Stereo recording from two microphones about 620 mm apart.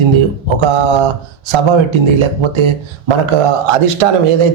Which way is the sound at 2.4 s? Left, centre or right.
Right.